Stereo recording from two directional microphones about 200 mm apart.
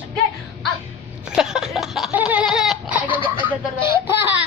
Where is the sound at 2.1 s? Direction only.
10° right (ahead or behind).